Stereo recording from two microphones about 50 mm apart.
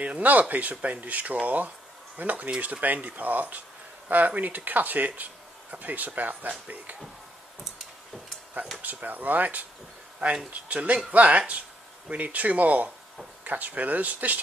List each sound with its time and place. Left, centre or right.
0.0 s speech: right
8.8 s speech: right